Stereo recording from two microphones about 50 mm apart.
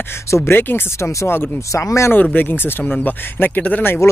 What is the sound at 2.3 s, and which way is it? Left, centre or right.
Speech, left.